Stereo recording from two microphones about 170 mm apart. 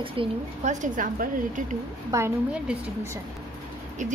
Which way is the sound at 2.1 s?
15° right (ahead or behind).